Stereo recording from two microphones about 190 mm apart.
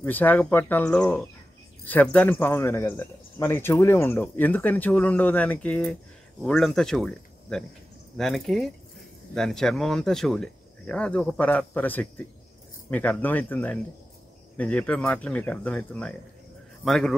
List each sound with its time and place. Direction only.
0.0 s speech: 10° left (ahead or behind)